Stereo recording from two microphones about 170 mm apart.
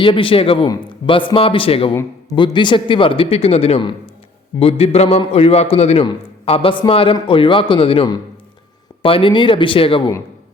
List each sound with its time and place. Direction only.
0.0 s a man's voice: 30° left (ahead or behind)